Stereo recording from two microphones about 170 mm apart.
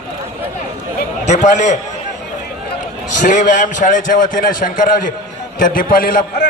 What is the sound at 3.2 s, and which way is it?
A man's voice, 50° left (ahead or behind).